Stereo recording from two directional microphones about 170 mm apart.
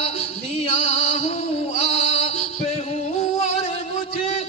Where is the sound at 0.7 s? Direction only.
35° left (ahead or behind).